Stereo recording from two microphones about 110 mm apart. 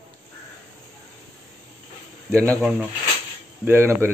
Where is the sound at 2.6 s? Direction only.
10° right (ahead or behind).